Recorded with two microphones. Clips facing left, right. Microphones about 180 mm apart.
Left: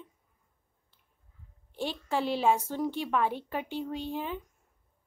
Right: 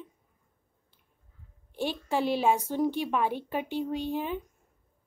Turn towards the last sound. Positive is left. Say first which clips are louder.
# right 4 dB
turn(degrees=-15)  # may be behind; listen again after turning